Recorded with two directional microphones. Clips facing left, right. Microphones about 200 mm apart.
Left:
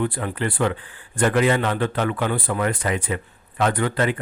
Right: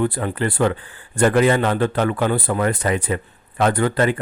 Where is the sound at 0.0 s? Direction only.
40° right (ahead or behind).